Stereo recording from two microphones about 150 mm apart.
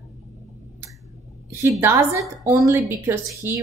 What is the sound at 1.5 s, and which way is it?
A woman's voice, 20° right (ahead or behind).